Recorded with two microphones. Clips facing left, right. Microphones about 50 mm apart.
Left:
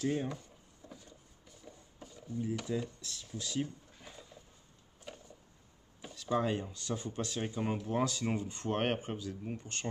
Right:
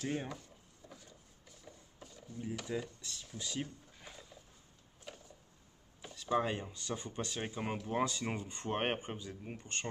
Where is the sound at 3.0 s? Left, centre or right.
Centre.